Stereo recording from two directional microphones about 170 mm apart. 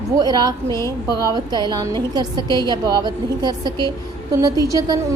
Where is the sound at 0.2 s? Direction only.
25° right (ahead or behind).